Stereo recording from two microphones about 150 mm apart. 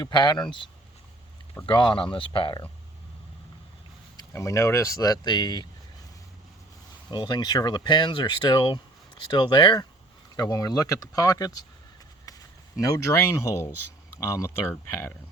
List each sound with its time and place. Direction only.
0.0 s speech: 30° left (ahead or behind)
4.2 s speech: 20° left (ahead or behind)
7.1 s speech: 30° left (ahead or behind)
12.8 s speech: 20° left (ahead or behind)